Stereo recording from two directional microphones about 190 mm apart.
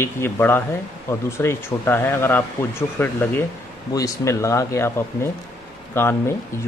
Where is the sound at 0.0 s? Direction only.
10° left (ahead or behind).